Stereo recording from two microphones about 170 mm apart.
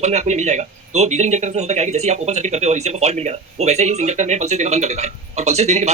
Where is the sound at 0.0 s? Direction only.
40° right (ahead or behind).